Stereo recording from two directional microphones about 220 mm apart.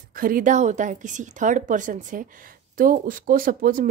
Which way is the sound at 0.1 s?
40° right (ahead or behind).